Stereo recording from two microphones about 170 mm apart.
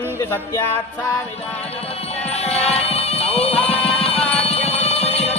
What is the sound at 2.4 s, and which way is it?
Music, 40° left (ahead or behind).